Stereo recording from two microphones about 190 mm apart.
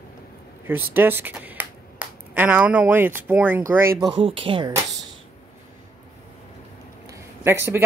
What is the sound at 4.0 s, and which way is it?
Speech, 30° right (ahead or behind).